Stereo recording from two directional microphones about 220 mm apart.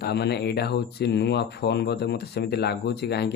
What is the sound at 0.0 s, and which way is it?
Speech, 50° left (ahead or behind).